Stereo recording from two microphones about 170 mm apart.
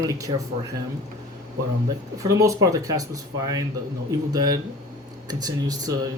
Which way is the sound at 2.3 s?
20° right (ahead or behind).